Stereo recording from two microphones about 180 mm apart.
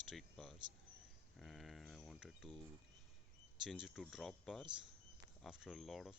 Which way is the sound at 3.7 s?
Centre (ahead or behind).